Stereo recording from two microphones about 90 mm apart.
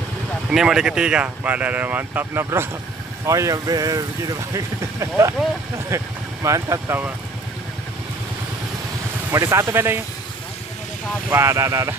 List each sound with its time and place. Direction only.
0.5 s speech: 5° right (ahead or behind); by 2.7 s 25° right (ahead or behind)
3.3 s speech: 35° right (ahead or behind)
5.9 s speech: 35° right (ahead or behind)
9.3 s speech: 30° right (ahead or behind)
11.3 s speech: 35° right (ahead or behind)